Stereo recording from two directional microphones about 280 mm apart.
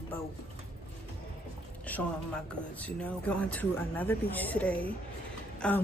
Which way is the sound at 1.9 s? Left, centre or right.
Centre.